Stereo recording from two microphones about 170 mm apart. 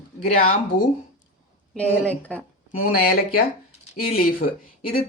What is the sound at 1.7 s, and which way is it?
Speech, 10° left (ahead or behind).